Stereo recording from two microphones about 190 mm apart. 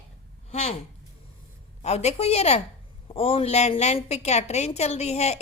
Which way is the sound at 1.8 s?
35° left (ahead or behind).